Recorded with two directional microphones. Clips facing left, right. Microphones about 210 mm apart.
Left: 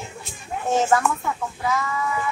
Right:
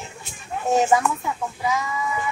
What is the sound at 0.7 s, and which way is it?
Speech, 10° right (ahead or behind).